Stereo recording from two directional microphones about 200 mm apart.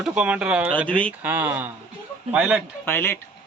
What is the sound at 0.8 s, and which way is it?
Speech, 5° left (ahead or behind).